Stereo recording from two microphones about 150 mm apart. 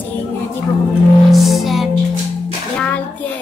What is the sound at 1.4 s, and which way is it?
Music, centre (ahead or behind).